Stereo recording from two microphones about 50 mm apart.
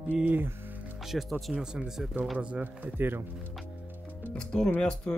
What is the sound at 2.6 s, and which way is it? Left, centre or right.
Speech, right.